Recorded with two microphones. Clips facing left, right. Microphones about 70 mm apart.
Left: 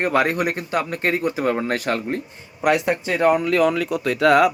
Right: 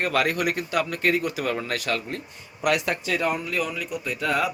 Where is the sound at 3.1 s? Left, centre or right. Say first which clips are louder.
Left 9 dB; left.